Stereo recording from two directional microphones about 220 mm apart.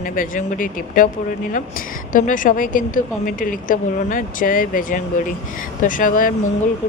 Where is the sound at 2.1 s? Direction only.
35° left (ahead or behind).